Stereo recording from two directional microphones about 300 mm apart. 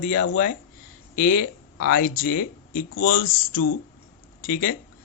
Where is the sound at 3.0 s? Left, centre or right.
Left.